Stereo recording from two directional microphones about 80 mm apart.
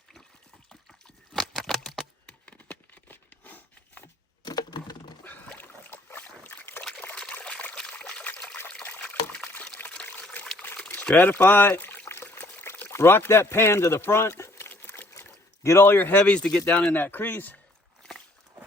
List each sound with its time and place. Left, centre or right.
0.7 s a sound: centre
2.5 s a sound: centre
4.4 s computer keyboard: left
5.5 s boat: left
7.6 s trickle: centre
9.0 s trickle: centre
9.7 s pour: centre
11.2 s speech: left
12.0 s pour: left
12.9 s a sound: left
16.2 s speech: centre
16.9 s speech: left